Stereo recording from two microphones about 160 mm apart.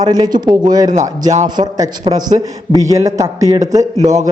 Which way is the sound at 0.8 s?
50° right (ahead or behind).